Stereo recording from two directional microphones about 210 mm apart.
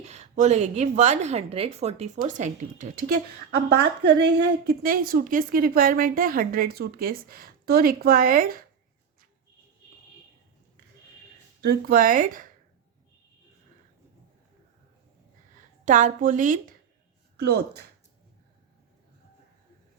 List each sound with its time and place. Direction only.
0.0 s a woman's voice: 30° right (ahead or behind)
4.0 s a woman's voice: 50° right (ahead or behind)
11.6 s a woman's voice: 45° right (ahead or behind)
15.8 s a woman's voice: 35° right (ahead or behind)
17.3 s a woman's voice: 50° right (ahead or behind)